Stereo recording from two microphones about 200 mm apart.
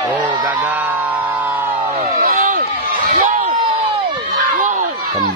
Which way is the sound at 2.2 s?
45° right (ahead or behind).